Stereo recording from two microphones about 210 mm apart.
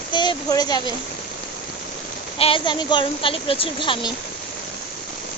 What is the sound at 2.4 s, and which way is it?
A woman's voice, 25° left (ahead or behind).